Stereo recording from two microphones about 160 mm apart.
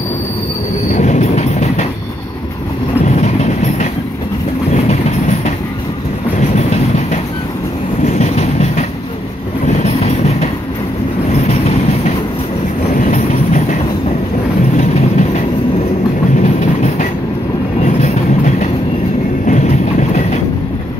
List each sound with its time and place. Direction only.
0.9 s train: 45° left (ahead or behind)
3.1 s train: 45° left (ahead or behind)
6.5 s train: 45° left (ahead or behind)
14.8 s train: 45° left (ahead or behind)